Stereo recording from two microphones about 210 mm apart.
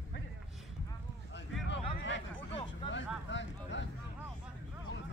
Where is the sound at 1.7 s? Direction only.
55° left (ahead or behind).